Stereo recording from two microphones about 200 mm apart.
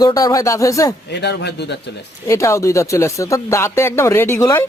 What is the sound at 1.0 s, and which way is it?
Speech, 55° left (ahead or behind).